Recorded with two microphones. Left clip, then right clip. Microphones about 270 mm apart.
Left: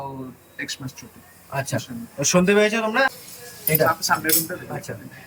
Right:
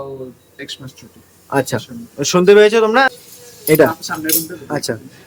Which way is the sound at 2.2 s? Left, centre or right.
Centre.